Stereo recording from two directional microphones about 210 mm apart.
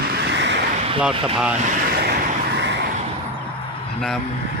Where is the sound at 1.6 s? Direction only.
40° right (ahead or behind).